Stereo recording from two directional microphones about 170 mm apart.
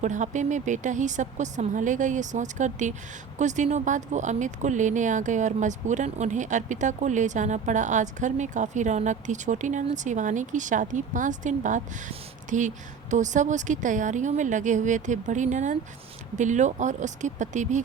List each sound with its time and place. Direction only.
0.0 s speech: 45° right (ahead or behind)